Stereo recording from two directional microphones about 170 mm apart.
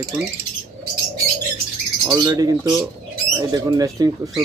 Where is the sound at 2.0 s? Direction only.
20° right (ahead or behind).